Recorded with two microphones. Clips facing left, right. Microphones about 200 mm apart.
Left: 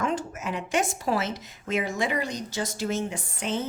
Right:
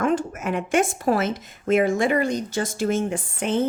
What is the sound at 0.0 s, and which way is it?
A woman's voice, 55° right (ahead or behind).